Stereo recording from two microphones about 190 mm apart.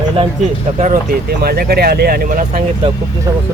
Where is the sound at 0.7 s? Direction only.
40° right (ahead or behind).